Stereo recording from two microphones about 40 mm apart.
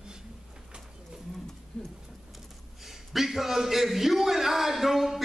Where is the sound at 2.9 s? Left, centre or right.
Centre.